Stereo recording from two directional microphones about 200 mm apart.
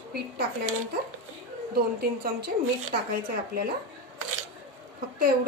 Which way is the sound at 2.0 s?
50° right (ahead or behind).